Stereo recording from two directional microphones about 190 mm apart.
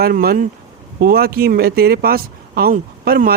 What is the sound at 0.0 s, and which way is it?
Speech, 50° right (ahead or behind).